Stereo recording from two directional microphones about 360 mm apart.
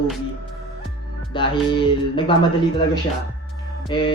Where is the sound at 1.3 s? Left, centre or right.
Centre.